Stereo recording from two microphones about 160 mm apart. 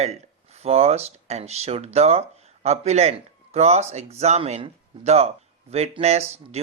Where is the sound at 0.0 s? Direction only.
40° right (ahead or behind).